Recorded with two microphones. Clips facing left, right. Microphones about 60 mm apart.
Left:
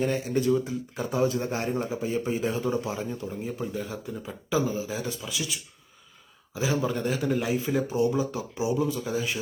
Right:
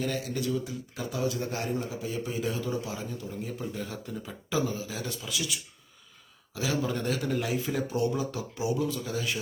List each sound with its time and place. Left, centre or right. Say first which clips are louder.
0.0 s speech: left 6 dB; left
3.8 s speech: left 3 dB; centre
6.5 s speech: left 3 dB; left